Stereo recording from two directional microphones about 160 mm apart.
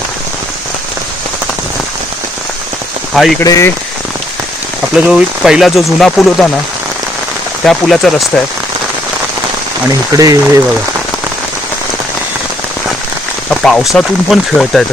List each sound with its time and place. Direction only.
3.4 s speech: 20° left (ahead or behind)
4.9 s speech: 5° right (ahead or behind)
7.6 s speech: centre (ahead or behind)
10.1 s speech: 20° right (ahead or behind)
13.5 s speech: 5° left (ahead or behind)